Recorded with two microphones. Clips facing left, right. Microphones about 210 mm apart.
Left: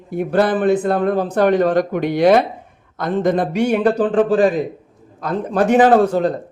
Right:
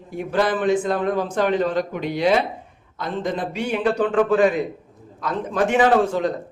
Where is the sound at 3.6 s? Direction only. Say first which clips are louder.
Left 6 dB; 45° left (ahead or behind).